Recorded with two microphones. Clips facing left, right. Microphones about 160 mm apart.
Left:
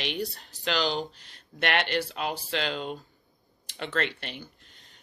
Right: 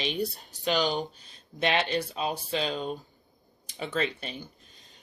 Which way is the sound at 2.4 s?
80° left.